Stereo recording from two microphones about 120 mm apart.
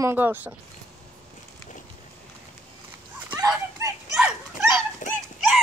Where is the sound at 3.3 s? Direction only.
30° right (ahead or behind).